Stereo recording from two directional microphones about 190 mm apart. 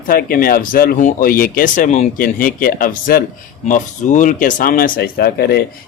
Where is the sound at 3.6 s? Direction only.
40° left (ahead or behind).